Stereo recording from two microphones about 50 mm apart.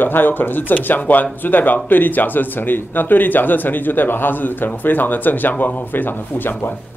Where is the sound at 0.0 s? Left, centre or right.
Left.